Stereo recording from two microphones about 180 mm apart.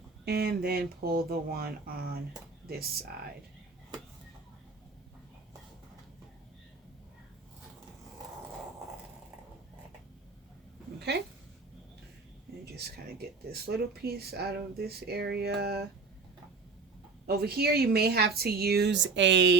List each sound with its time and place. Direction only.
0.3 s speech: 60° right (ahead or behind)
11.1 s speech: 65° right (ahead or behind)
12.7 s speech: 60° right (ahead or behind)
17.2 s speech: 60° right (ahead or behind); by 19.5 s 80° right